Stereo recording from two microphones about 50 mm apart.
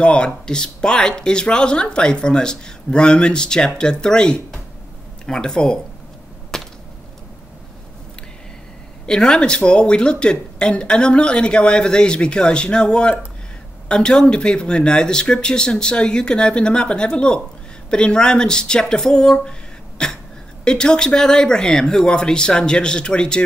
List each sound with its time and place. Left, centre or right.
0.0 s speech: left
6.5 s a sound: centre
9.0 s speech: centre